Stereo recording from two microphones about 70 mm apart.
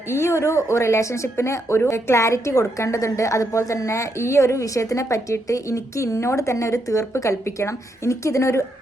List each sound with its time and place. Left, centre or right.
0.1 s speech: left